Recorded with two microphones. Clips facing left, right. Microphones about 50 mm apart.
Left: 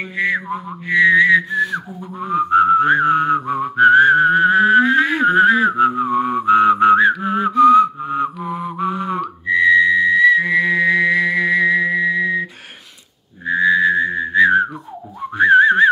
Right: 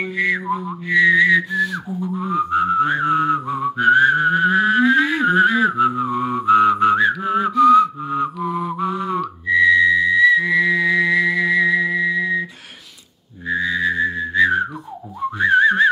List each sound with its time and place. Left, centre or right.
0.0 s music: left
0.8 s whistling: left
8.0 s music: centre
8.8 s a sound: left
9.2 s whistling: left
13.5 s whistling: left